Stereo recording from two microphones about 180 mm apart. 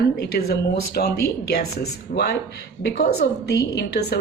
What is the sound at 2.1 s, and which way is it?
A woman's voice, 65° left (ahead or behind).